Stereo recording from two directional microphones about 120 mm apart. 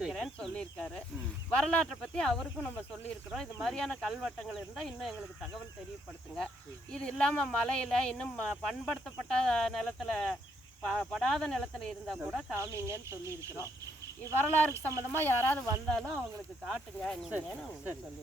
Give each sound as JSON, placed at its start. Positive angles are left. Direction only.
{"t": 0.0, "sound": "snake", "side_deg": 5}
{"t": 1.5, "sound": "speech", "side_deg": 10}
{"t": 3.2, "sound": "speech", "side_deg": 0}
{"t": 6.9, "sound": "speech", "side_deg": 5}
{"t": 12.5, "sound": "speech", "side_deg": -25}
{"t": 14.3, "sound": "speech", "side_deg": 15}
{"t": 15.9, "sound": "speech", "side_deg": 5}